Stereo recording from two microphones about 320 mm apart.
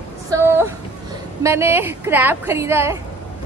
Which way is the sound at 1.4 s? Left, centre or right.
Centre.